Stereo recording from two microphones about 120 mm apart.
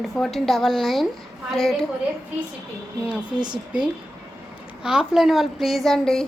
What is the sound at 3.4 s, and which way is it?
Speech, 40° right (ahead or behind).